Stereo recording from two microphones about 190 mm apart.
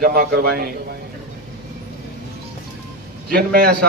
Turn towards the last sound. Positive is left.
turn(degrees=-55)  # may be behind; listen again after turning